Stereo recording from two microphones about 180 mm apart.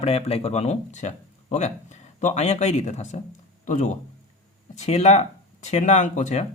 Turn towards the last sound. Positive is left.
turn(degrees=40)  # may be behind; listen again after turning